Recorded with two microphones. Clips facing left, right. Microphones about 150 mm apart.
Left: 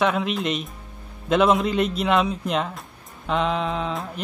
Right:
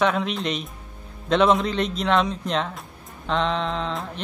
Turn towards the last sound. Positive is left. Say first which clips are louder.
# left 1 dB
turn(degrees=5)  # may be behind; listen again after turning